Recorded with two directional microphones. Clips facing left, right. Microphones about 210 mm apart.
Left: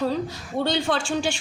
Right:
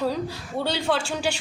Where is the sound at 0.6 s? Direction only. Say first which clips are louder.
Left 1 dB; 5° right (ahead or behind).